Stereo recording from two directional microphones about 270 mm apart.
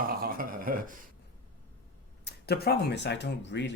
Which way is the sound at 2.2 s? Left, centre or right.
Left.